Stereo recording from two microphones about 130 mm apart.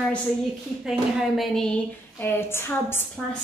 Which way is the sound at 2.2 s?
20° left (ahead or behind).